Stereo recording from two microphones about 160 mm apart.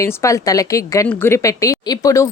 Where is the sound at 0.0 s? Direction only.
20° left (ahead or behind).